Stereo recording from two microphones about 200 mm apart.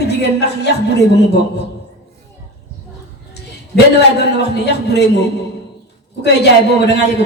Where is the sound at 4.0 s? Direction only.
55° left (ahead or behind).